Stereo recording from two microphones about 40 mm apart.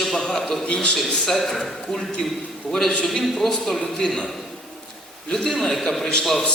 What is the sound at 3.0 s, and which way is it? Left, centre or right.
A man's voice, centre.